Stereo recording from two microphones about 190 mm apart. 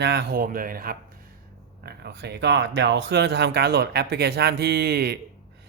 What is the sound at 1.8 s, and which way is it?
Speech, 60° right (ahead or behind).